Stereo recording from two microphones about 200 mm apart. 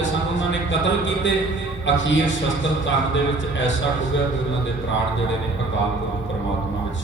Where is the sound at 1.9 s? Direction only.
65° left (ahead or behind).